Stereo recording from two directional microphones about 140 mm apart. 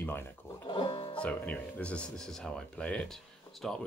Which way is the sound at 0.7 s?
40° left (ahead or behind).